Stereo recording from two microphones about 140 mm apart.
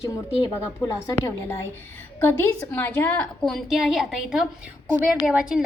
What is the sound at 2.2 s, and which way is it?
A woman's voice, 15° left (ahead or behind).